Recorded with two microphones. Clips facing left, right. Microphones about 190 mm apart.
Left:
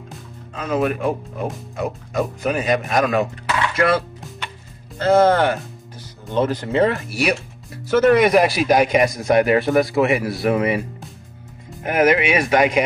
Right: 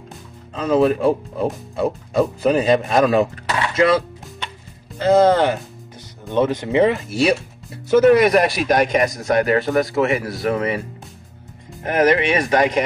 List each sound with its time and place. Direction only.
0.6 s speech: 30° right (ahead or behind)
4.9 s speech: 15° right (ahead or behind)
8.0 s a man's voice: centre (ahead or behind)
11.8 s a man's voice: 10° left (ahead or behind)